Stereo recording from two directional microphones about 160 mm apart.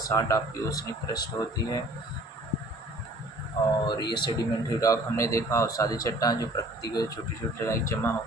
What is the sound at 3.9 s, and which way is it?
A man's voice, 30° left (ahead or behind).